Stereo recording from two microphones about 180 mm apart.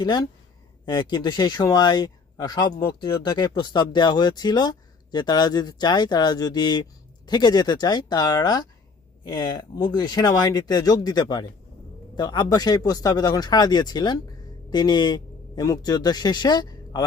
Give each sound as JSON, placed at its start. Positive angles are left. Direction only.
{"t": 0.9, "sound": "speech", "side_deg": 25}